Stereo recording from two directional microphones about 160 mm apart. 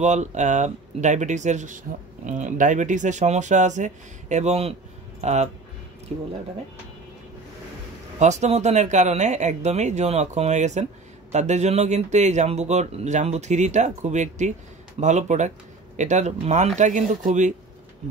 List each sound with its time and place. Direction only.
0.0 s a man's voice: 45° right (ahead or behind)
6.1 s speech: 35° right (ahead or behind)
8.2 s a man's voice: 45° right (ahead or behind)